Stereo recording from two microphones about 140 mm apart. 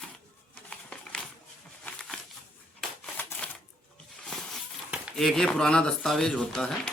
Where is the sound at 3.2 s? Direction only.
10° left (ahead or behind).